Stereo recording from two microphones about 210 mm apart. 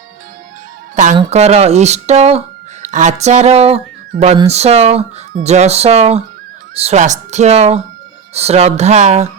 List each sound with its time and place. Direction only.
1.3 s speech: 30° right (ahead or behind)